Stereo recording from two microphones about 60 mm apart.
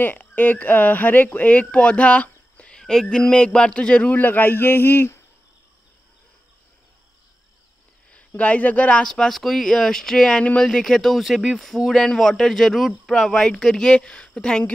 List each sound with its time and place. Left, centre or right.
0.0 s speech: left
8.4 s speech: left
9.0 s speech: centre